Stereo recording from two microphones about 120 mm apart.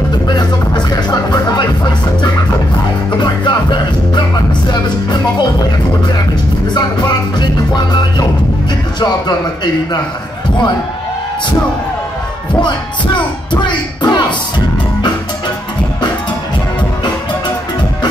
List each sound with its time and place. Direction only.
0.3 s music: 35° left (ahead or behind)
3.1 s music: 40° left (ahead or behind)
6.7 s music: 40° left (ahead or behind)
12.5 s music: 40° left (ahead or behind)